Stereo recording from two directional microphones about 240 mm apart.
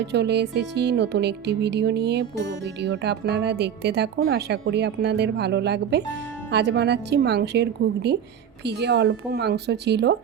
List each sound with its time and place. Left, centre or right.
0.0 s speech: right